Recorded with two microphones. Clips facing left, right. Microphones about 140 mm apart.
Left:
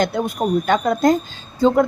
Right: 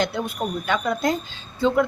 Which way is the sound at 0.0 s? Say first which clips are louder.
Left 5 dB; 45° left (ahead or behind).